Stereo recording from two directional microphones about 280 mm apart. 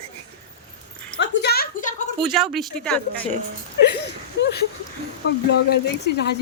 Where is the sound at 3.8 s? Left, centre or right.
Left.